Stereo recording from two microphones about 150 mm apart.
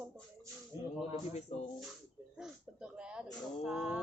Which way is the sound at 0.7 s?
20° right (ahead or behind).